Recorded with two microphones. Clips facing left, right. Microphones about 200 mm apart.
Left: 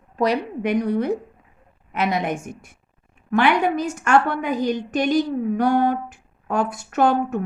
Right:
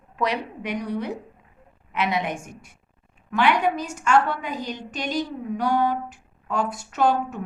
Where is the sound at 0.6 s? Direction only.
50° left (ahead or behind).